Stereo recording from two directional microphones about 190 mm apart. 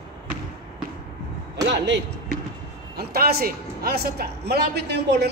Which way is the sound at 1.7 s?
65° right (ahead or behind).